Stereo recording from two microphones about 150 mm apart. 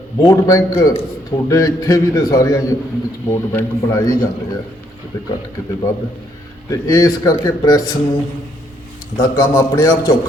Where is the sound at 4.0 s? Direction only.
25° left (ahead or behind).